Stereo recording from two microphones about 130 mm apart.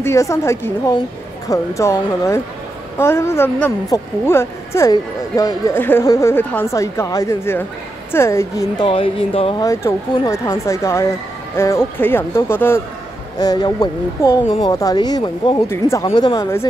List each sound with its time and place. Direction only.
0.0 s speech: 25° left (ahead or behind)
8.7 s speech: 40° left (ahead or behind)
9.6 s speech: 25° left (ahead or behind)
13.4 s speech: 30° left (ahead or behind)